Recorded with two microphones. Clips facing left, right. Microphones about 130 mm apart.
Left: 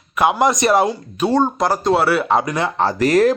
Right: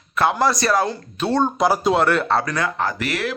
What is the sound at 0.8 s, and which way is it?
Speech, 10° left (ahead or behind).